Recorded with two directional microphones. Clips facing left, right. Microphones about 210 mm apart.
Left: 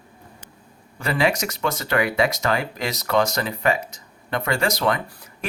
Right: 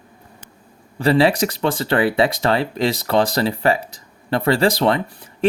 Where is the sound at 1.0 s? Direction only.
30° right (ahead or behind).